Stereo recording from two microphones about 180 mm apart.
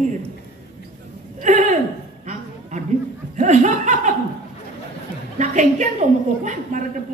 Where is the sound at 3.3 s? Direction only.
40° right (ahead or behind).